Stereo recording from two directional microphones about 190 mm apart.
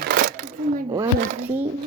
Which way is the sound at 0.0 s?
55° right (ahead or behind).